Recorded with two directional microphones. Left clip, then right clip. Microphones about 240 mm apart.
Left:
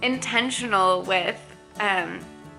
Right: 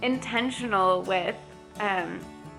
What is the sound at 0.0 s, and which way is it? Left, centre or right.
Speech, centre.